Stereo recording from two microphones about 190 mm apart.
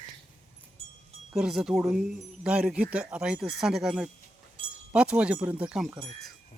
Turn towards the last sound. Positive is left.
turn(degrees=-5)  # may be behind; listen again after turning